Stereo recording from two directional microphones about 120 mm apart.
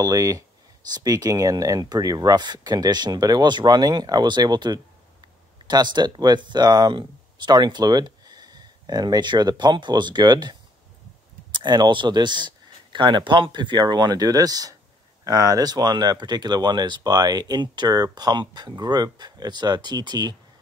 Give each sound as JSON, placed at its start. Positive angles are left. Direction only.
{"t": 0.0, "sound": "speech", "side_deg": -30}